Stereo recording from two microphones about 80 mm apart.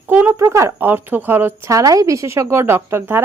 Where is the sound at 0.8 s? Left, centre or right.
Right.